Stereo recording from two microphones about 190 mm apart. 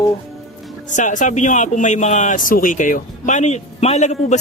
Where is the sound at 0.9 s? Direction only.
40° left (ahead or behind).